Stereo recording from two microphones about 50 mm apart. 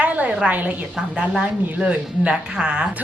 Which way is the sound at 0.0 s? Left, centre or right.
Right.